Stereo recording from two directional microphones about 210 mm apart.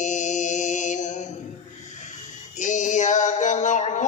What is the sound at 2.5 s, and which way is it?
Male singing, 35° left (ahead or behind).